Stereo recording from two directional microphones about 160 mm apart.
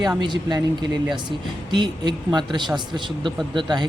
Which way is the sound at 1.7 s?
30° right (ahead or behind).